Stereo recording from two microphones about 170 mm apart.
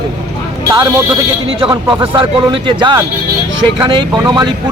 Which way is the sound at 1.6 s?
30° right (ahead or behind).